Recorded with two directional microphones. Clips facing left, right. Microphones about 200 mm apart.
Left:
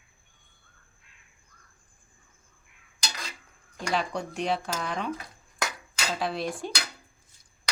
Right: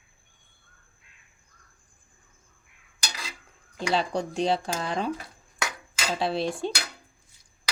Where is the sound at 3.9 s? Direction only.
30° right (ahead or behind).